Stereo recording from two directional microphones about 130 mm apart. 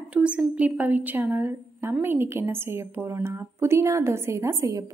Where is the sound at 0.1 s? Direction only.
10° right (ahead or behind).